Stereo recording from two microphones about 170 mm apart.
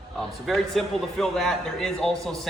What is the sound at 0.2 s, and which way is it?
A man's voice, centre (ahead or behind).